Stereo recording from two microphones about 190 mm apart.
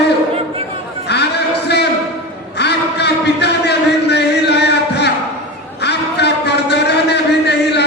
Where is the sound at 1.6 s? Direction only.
60° left (ahead or behind).